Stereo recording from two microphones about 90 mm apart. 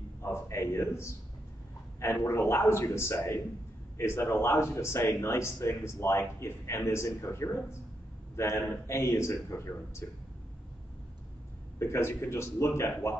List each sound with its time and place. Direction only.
0.2 s a sound: 30° left (ahead or behind)
2.0 s a man's voice: 30° left (ahead or behind)
11.8 s speech: 30° left (ahead or behind)